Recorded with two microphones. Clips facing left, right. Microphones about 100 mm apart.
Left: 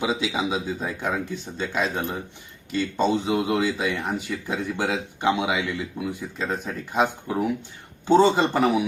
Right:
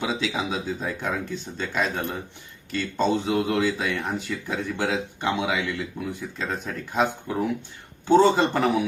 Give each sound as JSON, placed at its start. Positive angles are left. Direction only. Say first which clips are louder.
{"t": 0.0, "sound": "a man's voice", "louder": "left 2 dB", "side_deg": 10}